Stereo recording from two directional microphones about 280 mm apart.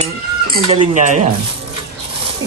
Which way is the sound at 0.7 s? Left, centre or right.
Right.